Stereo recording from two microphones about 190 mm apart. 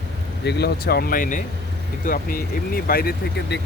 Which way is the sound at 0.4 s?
60° left (ahead or behind).